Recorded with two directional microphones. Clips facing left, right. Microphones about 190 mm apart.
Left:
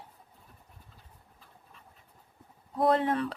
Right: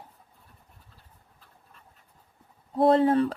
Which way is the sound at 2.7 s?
30° right (ahead or behind).